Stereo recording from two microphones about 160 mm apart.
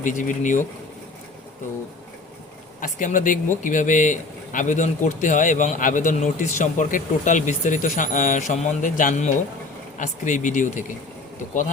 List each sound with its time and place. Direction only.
0.0 s speech: 55° left (ahead or behind)
2.8 s speech: 55° left (ahead or behind)